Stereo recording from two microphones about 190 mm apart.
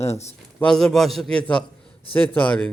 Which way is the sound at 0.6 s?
5° left (ahead or behind).